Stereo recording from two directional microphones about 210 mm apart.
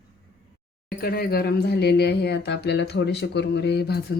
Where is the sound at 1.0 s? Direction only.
45° left (ahead or behind).